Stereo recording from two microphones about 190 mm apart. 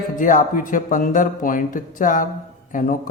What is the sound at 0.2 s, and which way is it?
Speech, 45° left (ahead or behind).